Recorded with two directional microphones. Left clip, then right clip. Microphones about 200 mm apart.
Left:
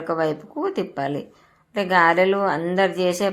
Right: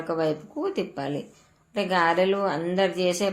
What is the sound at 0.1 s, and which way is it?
A woman's voice, 25° left (ahead or behind).